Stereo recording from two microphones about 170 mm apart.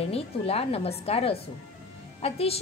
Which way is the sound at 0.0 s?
35° left (ahead or behind).